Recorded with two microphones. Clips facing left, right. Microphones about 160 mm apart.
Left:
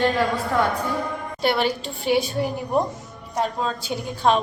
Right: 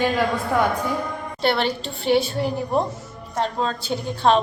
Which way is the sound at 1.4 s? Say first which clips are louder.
Even; 10° left (ahead or behind).